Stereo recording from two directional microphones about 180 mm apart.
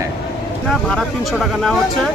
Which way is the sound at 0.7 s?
Centre (ahead or behind).